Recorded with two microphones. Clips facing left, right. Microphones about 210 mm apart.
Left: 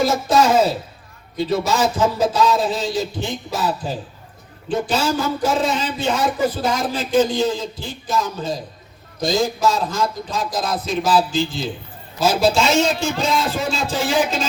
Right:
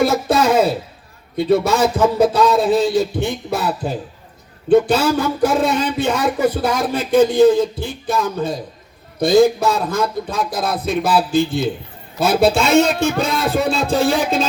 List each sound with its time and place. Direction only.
0.0 s speech: 60° right (ahead or behind)